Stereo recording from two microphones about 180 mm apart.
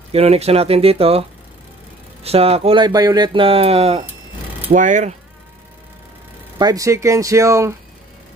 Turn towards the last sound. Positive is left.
turn(degrees=-15)  # may be behind; listen again after turning